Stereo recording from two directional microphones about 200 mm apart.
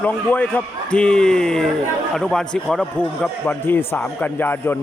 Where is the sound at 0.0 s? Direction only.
10° left (ahead or behind).